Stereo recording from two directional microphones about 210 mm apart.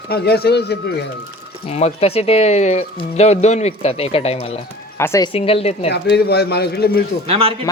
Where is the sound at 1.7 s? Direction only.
30° left (ahead or behind).